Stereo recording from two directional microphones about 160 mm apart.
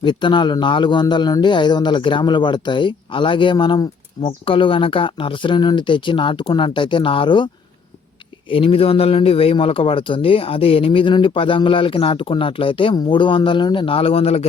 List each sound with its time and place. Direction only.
0.0 s speech: 30° left (ahead or behind)